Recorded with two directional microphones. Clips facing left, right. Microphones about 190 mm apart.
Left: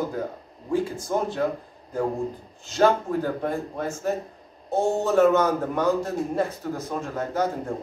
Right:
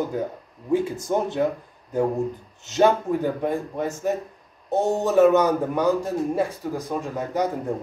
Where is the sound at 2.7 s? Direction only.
15° right (ahead or behind).